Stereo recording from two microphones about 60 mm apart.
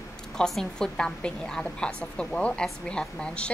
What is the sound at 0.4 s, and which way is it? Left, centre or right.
A woman's voice, centre.